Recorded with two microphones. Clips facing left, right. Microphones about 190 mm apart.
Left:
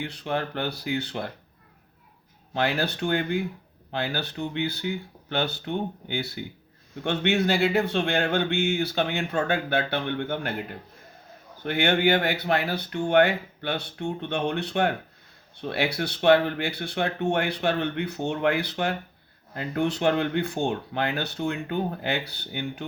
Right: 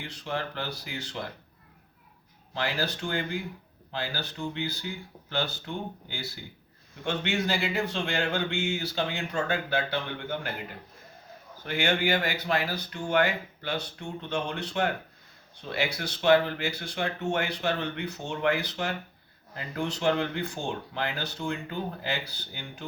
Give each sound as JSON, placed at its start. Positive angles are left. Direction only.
{"t": 0.0, "sound": "speech", "side_deg": 60}
{"t": 2.5, "sound": "speech", "side_deg": 60}
{"t": 11.6, "sound": "speech", "side_deg": 60}